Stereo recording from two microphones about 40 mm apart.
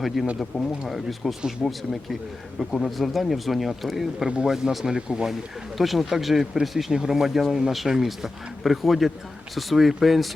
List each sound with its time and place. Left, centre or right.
0.2 s speech: centre
0.5 s speech: right
0.9 s speech: centre
4.4 s speech: centre
4.9 s speech: centre
5.3 s speech: centre